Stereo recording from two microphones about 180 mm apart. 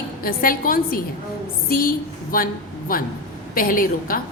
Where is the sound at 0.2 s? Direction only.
55° left (ahead or behind).